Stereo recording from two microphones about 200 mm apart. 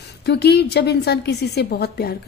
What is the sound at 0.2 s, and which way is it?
A woman's voice, 55° left (ahead or behind).